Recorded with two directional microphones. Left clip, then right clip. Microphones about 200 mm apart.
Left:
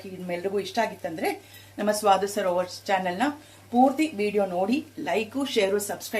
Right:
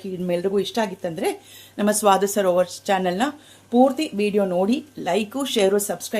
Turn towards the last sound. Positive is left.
turn(degrees=-65)  # may be behind; listen again after turning